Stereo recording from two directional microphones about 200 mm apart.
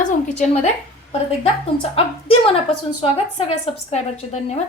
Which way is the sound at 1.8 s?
30° left (ahead or behind).